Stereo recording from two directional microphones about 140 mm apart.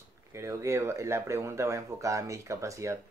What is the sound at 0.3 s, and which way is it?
Speech, 20° right (ahead or behind).